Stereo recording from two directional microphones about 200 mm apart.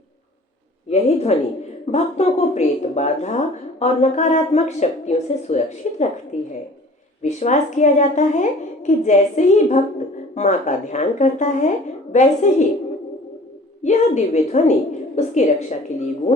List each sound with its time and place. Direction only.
0.9 s a woman's voice: 30° left (ahead or behind)
13.8 s a woman's voice: 35° left (ahead or behind)